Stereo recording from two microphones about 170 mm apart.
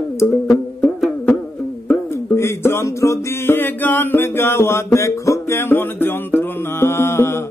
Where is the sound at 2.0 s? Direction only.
15° left (ahead or behind).